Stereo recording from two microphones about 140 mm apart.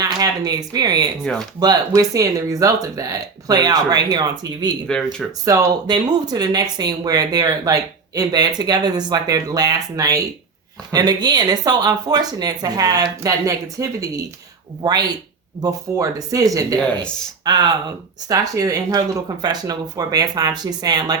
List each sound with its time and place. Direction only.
0.0 s speech: 25° right (ahead or behind)
4.9 s speech: 5° left (ahead or behind)
5.5 s speech: 25° right (ahead or behind)